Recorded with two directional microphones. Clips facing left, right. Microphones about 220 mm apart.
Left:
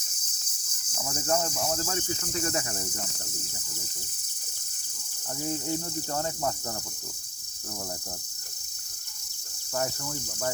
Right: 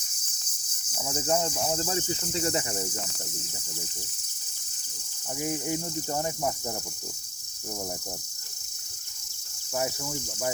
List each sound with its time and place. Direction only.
0.9 s speech: 15° right (ahead or behind)
5.4 s cricket: 15° right (ahead or behind)
9.7 s cricket: 10° right (ahead or behind)